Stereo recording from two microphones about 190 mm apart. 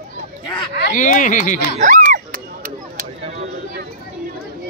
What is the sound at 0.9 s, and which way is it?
Speech, 45° left (ahead or behind).